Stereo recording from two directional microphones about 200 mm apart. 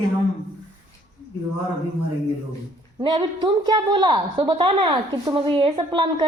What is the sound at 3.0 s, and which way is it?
A woman's voice, 25° right (ahead or behind).